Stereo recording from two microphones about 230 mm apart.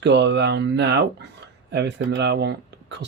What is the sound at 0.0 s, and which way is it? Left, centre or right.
Speech, right.